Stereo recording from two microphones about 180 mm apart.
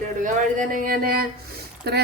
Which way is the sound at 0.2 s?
45° right (ahead or behind).